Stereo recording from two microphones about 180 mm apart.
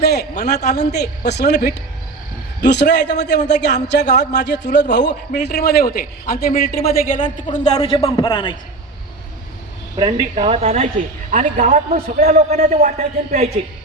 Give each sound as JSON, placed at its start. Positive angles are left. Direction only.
{"t": 0.0, "sound": "a sound", "side_deg": 65}
{"t": 0.7, "sound": "a woman's voice", "side_deg": 65}
{"t": 7.8, "sound": "a man's voice", "side_deg": 30}
{"t": 10.0, "sound": "a man's voice", "side_deg": -35}